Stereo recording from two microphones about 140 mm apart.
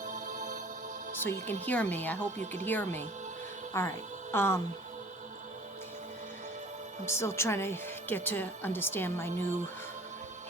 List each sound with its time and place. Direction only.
0.0 s music: 70° right (ahead or behind)
1.2 s a woman's voice: 15° left (ahead or behind)
7.0 s a woman's voice: 20° left (ahead or behind)